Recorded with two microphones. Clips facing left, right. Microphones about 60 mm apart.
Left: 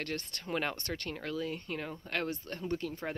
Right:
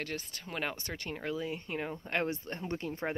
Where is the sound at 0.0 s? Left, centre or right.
Centre.